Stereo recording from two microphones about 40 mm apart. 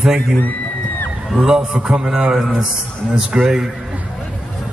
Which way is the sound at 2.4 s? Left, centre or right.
Centre.